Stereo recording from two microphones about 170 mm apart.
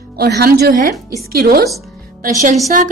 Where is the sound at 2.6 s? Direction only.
45° right (ahead or behind).